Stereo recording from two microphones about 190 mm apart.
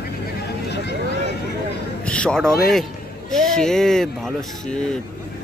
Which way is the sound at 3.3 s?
Centre (ahead or behind).